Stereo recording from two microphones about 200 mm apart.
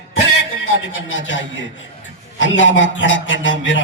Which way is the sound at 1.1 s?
70° left (ahead or behind).